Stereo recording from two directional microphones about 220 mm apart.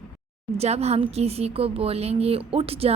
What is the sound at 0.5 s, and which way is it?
A woman's voice, 30° right (ahead or behind).